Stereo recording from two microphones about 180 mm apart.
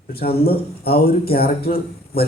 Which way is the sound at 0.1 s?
60° left (ahead or behind).